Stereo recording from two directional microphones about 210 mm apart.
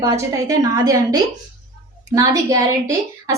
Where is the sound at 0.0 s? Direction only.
15° right (ahead or behind).